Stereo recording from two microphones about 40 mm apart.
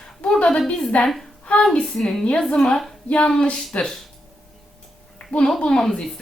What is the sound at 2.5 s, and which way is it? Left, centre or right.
Speech, left.